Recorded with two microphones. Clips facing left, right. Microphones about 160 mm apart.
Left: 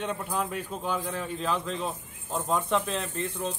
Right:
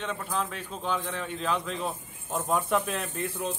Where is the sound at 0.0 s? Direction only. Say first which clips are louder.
Left 1 dB; 10° left (ahead or behind).